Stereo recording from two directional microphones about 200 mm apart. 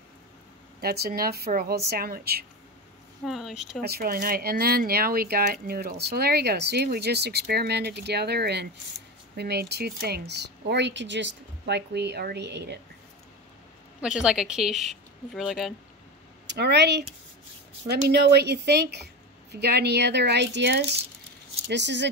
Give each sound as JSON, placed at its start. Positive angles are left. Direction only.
{"t": 0.7, "sound": "speech", "side_deg": -50}
{"t": 3.3, "sound": "a woman's voice", "side_deg": 0}
{"t": 3.8, "sound": "speech", "side_deg": -50}
{"t": 14.0, "sound": "a woman's voice", "side_deg": -5}
{"t": 16.4, "sound": "speech", "side_deg": -55}